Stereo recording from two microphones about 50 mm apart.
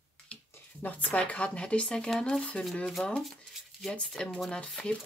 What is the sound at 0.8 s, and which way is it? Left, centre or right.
Speech, left.